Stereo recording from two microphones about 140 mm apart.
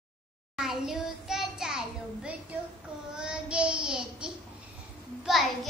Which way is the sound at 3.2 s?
5° right (ahead or behind).